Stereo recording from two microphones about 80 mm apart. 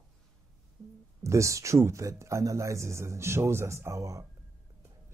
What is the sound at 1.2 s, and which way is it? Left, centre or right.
Speech, right.